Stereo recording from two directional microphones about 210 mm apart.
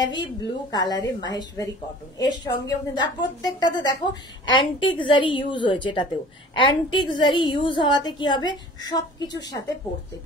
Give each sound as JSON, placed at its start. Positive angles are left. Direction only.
{"t": 0.1, "sound": "a woman's voice", "side_deg": 20}